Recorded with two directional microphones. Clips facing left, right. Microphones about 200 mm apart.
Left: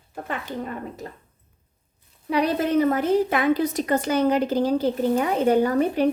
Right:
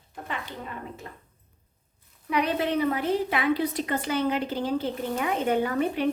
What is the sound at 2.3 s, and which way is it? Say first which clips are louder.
A woman's voice: left 5 dB; 40° left (ahead or behind).